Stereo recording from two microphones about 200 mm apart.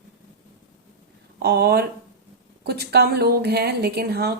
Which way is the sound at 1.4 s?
55° right (ahead or behind).